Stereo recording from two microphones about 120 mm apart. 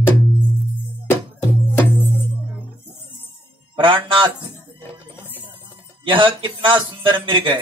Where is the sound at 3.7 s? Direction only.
45° right (ahead or behind).